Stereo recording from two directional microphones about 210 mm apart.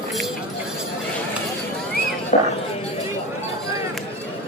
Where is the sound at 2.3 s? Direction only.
35° left (ahead or behind).